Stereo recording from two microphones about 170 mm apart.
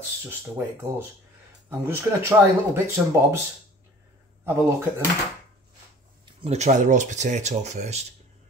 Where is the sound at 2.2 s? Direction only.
15° right (ahead or behind).